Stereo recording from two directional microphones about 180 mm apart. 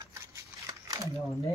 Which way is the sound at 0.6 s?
20° right (ahead or behind).